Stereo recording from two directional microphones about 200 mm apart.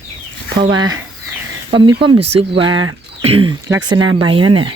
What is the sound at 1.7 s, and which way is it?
Speech, 25° right (ahead or behind).